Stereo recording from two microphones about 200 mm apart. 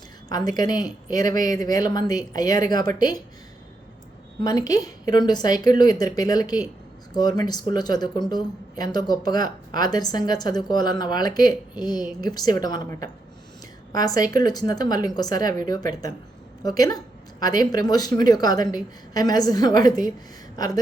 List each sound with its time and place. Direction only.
0.3 s speech: 20° left (ahead or behind)
4.4 s speech: 20° left (ahead or behind)